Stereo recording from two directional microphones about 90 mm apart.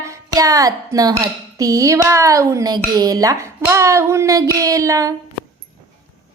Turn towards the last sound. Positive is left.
turn(degrees=-40)  # may be behind; listen again after turning